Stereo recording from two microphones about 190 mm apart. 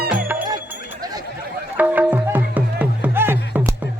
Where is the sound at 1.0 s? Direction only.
20° right (ahead or behind).